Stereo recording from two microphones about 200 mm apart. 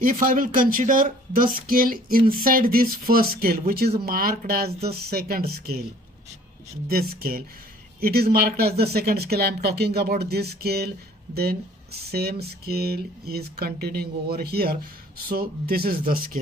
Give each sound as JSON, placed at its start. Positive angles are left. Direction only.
{"t": 0.0, "sound": "speech", "side_deg": -45}
{"t": 6.9, "sound": "speech", "side_deg": -50}